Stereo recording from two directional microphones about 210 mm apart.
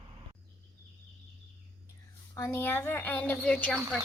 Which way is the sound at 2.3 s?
15° left (ahead or behind).